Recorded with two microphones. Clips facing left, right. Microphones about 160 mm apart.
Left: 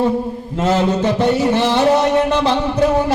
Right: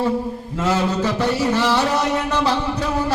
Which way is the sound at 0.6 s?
20° left (ahead or behind).